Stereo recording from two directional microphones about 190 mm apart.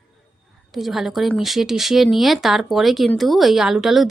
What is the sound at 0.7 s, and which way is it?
A woman's voice, centre (ahead or behind).